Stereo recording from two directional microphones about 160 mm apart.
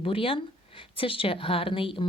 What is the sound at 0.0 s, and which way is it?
A woman's voice, 35° left (ahead or behind).